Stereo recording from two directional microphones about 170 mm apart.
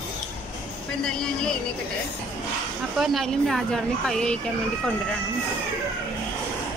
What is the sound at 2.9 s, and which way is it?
A woman's voice, centre (ahead or behind).